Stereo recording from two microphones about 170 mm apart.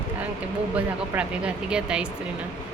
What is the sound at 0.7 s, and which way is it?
Speech, 5° right (ahead or behind).